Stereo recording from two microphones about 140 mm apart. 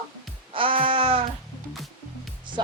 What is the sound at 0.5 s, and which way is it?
Music, 40° right (ahead or behind).